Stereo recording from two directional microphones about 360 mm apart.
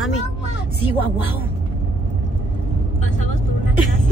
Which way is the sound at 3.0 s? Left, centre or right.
Centre.